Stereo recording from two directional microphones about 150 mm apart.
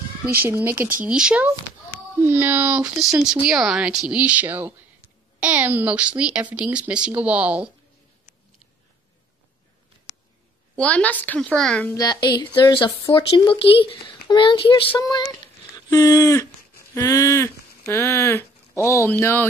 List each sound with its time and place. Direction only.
0.5 s speech: 10° right (ahead or behind)
10.8 s a woman's voice: 10° left (ahead or behind)
11.9 s a woman's voice: 25° left (ahead or behind)